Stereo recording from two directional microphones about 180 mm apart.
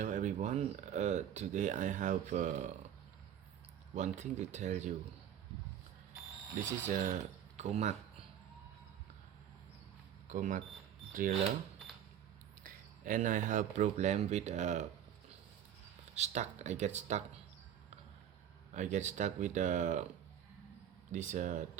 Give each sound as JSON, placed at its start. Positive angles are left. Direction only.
{"t": 0.0, "sound": "speech", "side_deg": -45}
{"t": 3.9, "sound": "speech", "side_deg": -45}
{"t": 6.7, "sound": "speech", "side_deg": -45}
{"t": 10.2, "sound": "speech", "side_deg": -45}
{"t": 12.6, "sound": "speech", "side_deg": -45}
{"t": 16.1, "sound": "speech", "side_deg": -40}
{"t": 18.7, "sound": "speech", "side_deg": -40}
{"t": 21.1, "sound": "speech", "side_deg": -45}